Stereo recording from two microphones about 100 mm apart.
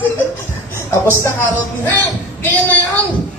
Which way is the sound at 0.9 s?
25° left (ahead or behind).